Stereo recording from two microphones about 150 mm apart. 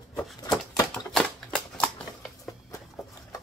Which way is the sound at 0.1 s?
5° left (ahead or behind).